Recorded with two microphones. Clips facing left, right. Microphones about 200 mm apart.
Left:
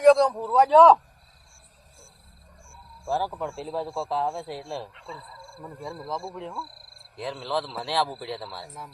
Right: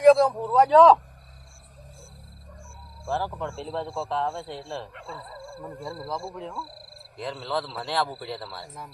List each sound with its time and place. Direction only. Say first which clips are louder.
0.0 s a man's voice: right 1 dB; centre (ahead or behind)
3.1 s a man's voice: left 1 dB; 5° left (ahead or behind)
4.9 s speech: right 2 dB; 55° right (ahead or behind)
6.0 s a man's voice: left 1 dB; 5° left (ahead or behind)